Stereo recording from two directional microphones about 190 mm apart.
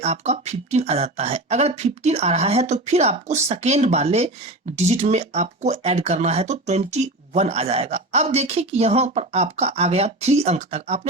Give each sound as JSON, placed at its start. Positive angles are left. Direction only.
{"t": 0.0, "sound": "speech", "side_deg": -35}